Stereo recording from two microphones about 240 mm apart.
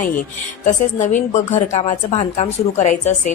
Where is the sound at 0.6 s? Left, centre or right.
Left.